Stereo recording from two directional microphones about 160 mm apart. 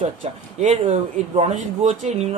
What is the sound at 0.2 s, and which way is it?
Speech, 45° right (ahead or behind).